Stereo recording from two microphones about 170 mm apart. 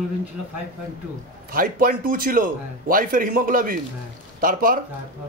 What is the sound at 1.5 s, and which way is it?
A man's voice, 55° right (ahead or behind).